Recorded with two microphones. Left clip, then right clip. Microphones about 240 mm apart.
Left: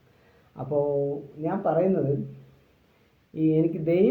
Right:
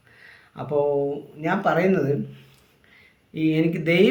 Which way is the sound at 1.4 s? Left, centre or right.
Right.